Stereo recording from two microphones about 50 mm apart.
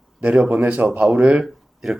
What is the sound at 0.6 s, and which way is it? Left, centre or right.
Speech, right.